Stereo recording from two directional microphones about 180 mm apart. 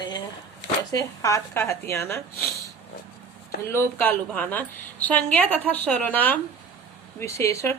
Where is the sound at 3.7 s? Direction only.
10° left (ahead or behind).